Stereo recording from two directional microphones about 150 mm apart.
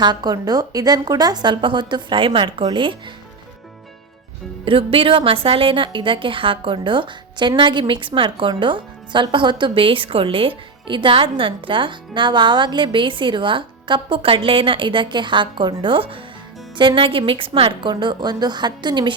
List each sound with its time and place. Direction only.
0.0 s a woman's voice: 30° right (ahead or behind)
4.6 s a woman's voice: 35° right (ahead or behind)